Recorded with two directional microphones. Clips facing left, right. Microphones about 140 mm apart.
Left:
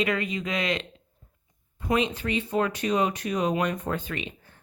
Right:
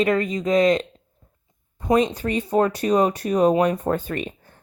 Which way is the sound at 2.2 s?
40° right (ahead or behind).